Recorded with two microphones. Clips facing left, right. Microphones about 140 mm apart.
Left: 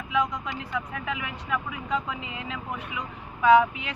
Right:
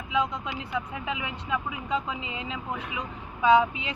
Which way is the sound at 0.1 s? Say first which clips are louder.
Left 1 dB; 30° right (ahead or behind).